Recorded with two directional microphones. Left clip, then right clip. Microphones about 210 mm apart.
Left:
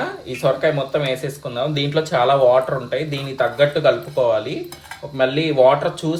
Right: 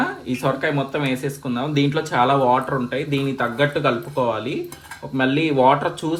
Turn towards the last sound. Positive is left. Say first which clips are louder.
# left 1 dB
turn(degrees=-30)  # may be behind; listen again after turning